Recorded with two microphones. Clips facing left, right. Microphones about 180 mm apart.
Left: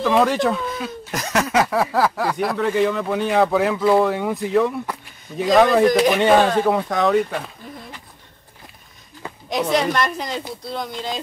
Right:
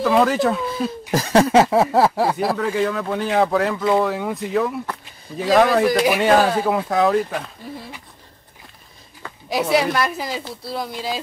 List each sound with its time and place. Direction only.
0.0 s speech: centre (ahead or behind)
0.7 s speech: 30° right (ahead or behind)
1.1 s a sound: 30° right (ahead or behind)
2.5 s speech: centre (ahead or behind)
9.5 s speech: 5° right (ahead or behind)